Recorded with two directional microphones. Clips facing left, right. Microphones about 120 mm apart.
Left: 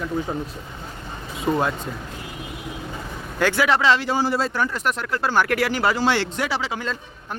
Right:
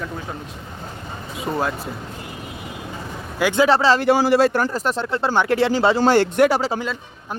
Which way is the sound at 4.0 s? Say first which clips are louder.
Right 7 dB; 75° right (ahead or behind).